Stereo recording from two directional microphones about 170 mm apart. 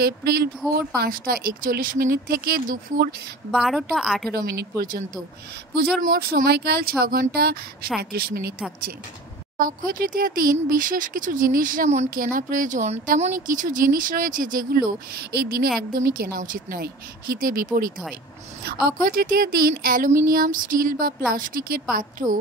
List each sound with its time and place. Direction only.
0.0 s speech: 70° right (ahead or behind)
3.5 s a woman's voice: centre (ahead or behind)
4.5 s speech: 65° right (ahead or behind)
6.0 s speech: 60° right (ahead or behind)
9.6 s speech: 55° right (ahead or behind)